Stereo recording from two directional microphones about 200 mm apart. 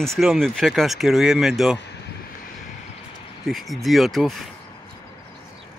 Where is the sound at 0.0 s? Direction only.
Centre (ahead or behind).